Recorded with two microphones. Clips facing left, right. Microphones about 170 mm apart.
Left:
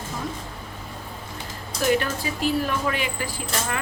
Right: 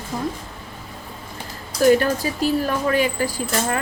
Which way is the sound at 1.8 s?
40° right (ahead or behind).